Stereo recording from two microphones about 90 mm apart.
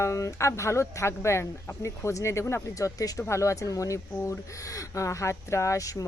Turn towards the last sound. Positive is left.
turn(degrees=40)  # may be behind; listen again after turning